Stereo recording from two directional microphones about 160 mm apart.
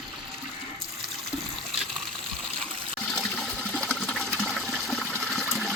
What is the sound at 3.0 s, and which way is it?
Toilet flush, 5° left (ahead or behind).